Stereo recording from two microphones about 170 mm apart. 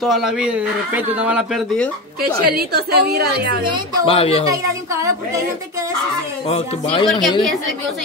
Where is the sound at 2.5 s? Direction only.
70° right (ahead or behind).